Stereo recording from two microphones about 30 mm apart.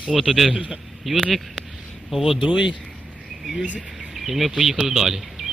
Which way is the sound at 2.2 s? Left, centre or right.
Centre.